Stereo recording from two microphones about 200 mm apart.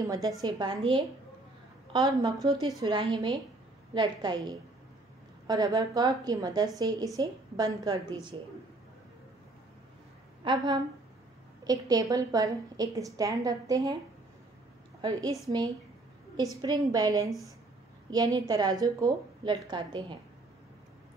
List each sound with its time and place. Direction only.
0.0 s a woman's voice: 15° right (ahead or behind)
2.3 s a woman's voice: centre (ahead or behind)
2.8 s a woman's voice: 25° right (ahead or behind)
10.4 s a woman's voice: 20° right (ahead or behind)
15.0 s a woman's voice: 20° right (ahead or behind)
16.6 s a woman's voice: 20° right (ahead or behind)